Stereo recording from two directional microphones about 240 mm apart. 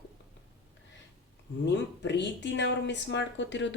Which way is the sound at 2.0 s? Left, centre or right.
Left.